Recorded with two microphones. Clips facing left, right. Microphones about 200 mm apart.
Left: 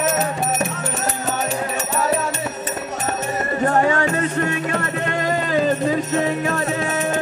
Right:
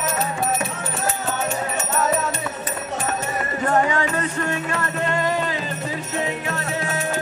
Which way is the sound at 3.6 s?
45° left (ahead or behind).